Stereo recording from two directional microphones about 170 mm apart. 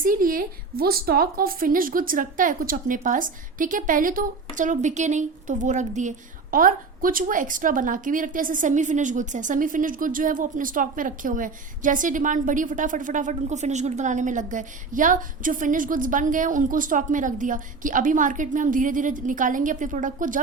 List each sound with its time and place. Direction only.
0.0 s a woman's voice: 55° right (ahead or behind)